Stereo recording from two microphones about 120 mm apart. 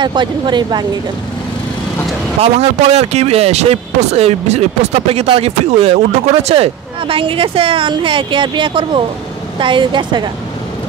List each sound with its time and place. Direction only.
0.0 s a woman's voice: 40° right (ahead or behind)
2.4 s a woman's voice: 60° right (ahead or behind); by 10.3 s 40° right (ahead or behind)